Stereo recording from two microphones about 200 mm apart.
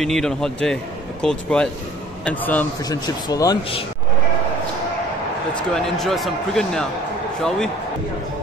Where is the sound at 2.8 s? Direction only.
20° left (ahead or behind).